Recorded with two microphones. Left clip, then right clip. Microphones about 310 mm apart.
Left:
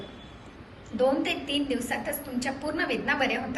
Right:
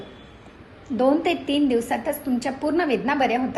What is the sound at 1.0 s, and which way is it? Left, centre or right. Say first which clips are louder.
A woman's voice: right 5 dB; centre.